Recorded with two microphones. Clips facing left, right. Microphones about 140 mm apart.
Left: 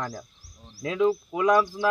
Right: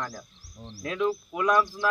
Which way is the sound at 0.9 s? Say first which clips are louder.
Left 4 dB; 20° left (ahead or behind).